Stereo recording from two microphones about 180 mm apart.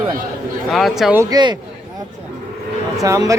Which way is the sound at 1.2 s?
20° right (ahead or behind).